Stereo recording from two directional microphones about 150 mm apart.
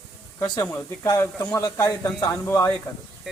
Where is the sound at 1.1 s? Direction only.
25° left (ahead or behind).